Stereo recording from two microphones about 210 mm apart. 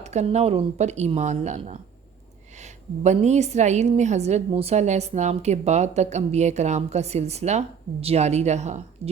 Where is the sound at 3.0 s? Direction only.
35° right (ahead or behind).